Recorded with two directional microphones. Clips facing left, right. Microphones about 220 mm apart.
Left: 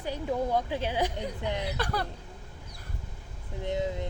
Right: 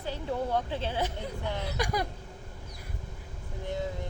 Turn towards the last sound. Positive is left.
turn(degrees=20)  # may be behind; listen again after turning